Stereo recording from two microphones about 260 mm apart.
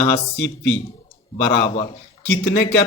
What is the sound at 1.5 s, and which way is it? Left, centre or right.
Speech, left.